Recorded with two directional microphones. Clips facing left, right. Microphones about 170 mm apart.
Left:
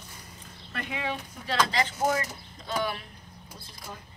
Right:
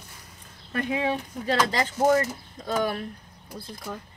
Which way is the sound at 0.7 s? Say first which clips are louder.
Right 7 dB; 45° right (ahead or behind).